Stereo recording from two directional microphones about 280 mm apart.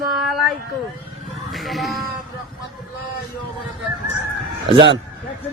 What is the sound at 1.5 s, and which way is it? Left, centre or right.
Speech, centre.